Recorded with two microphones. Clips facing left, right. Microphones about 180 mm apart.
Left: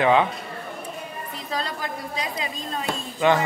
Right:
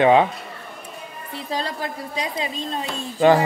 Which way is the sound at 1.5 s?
30° right (ahead or behind).